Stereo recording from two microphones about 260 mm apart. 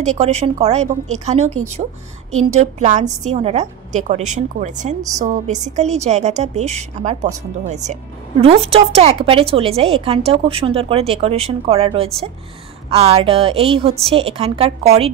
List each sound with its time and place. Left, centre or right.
0.0 s a woman's voice: right